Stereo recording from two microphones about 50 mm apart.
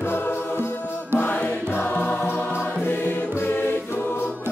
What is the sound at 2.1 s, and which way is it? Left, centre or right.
Music, left.